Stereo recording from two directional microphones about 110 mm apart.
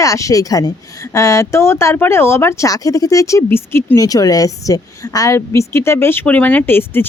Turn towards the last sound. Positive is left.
turn(degrees=20)  # may be behind; listen again after turning